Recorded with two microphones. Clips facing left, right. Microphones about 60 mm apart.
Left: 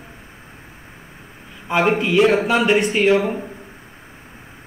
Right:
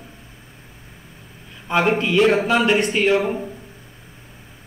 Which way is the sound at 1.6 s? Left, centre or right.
Centre.